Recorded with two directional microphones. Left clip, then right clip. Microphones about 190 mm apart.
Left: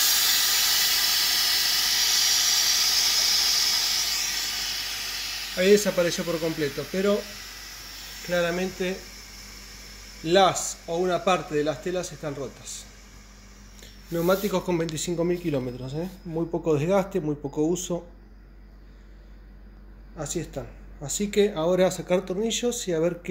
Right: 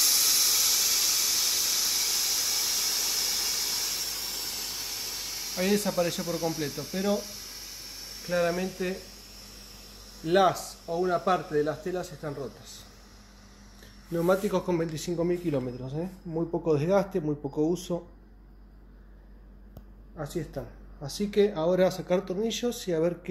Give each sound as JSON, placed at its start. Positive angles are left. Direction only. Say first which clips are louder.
{"t": 0.0, "sound": "steam", "louder": "left 2 dB", "side_deg": 0}
{"t": 4.5, "sound": "a sound", "louder": "left 6 dB", "side_deg": -15}
{"t": 5.6, "sound": "speech", "louder": "left 7 dB", "side_deg": 0}
{"t": 8.3, "sound": "speech", "louder": "left 2 dB", "side_deg": 10}
{"t": 10.2, "sound": "speech", "louder": "left 3 dB", "side_deg": 10}
{"t": 14.1, "sound": "speech", "louder": "left 2 dB", "side_deg": 0}
{"t": 20.2, "sound": "speech", "louder": "left 3 dB", "side_deg": 5}